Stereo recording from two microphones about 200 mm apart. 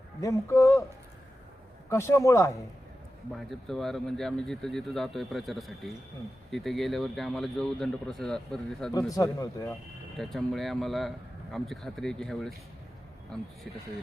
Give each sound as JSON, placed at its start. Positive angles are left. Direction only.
{"t": 0.2, "sound": "speech", "side_deg": 15}
{"t": 1.9, "sound": "speech", "side_deg": 15}
{"t": 3.3, "sound": "speech", "side_deg": 0}
{"t": 8.9, "sound": "speech", "side_deg": 15}
{"t": 10.2, "sound": "speech", "side_deg": 0}